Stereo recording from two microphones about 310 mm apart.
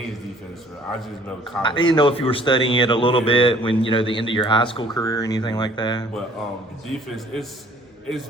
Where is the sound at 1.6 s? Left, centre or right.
Centre.